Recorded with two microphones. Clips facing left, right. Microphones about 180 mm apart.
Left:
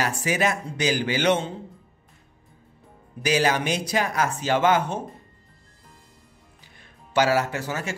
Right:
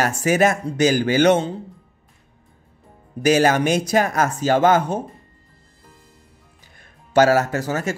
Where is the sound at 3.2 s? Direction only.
50° right (ahead or behind).